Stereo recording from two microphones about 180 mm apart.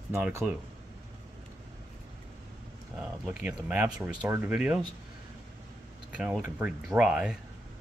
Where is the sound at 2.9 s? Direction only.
5° right (ahead or behind).